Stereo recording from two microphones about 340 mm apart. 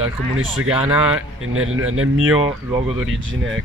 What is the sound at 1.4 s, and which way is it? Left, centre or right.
Speech, right.